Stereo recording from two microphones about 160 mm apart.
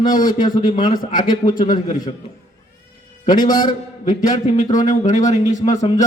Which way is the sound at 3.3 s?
55° left (ahead or behind).